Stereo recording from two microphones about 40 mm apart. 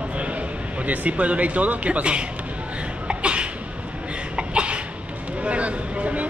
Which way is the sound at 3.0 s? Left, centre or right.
Right.